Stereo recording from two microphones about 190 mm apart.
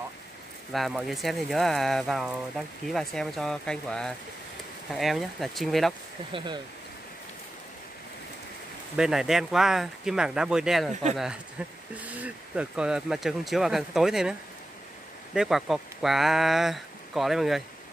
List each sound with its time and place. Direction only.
0.7 s speech: centre (ahead or behind)
6.3 s speech: 25° right (ahead or behind)
8.9 s speech: 5° right (ahead or behind)
11.9 s speech: 10° right (ahead or behind)
15.3 s speech: centre (ahead or behind)